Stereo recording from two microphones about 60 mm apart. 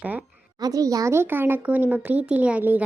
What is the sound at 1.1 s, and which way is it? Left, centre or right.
Speech, right.